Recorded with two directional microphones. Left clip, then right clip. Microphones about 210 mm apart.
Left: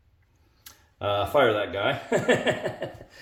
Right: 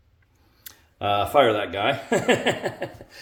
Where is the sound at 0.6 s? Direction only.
30° right (ahead or behind).